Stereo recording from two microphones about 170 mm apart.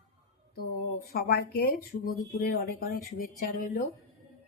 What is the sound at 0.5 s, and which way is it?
Speech, 60° left (ahead or behind).